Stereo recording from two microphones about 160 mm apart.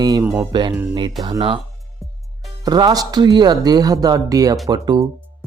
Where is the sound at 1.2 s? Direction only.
25° right (ahead or behind).